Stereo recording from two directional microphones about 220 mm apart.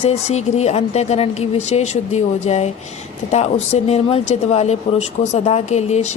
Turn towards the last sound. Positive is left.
turn(degrees=30)  # may be behind; listen again after turning